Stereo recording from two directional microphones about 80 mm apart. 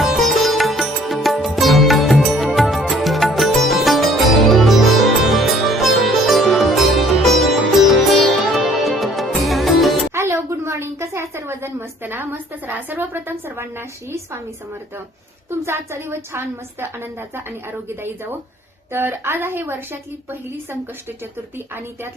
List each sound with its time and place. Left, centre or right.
0.0 s music: centre
0.3 s sitar: centre
1.5 s music: centre
10.2 s a sound: right
15.4 s a woman's voice: right